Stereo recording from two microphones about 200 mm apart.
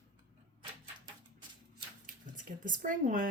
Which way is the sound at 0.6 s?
25° right (ahead or behind).